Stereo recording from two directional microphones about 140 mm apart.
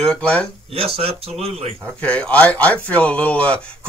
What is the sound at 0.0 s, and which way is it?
Speech, 5° left (ahead or behind).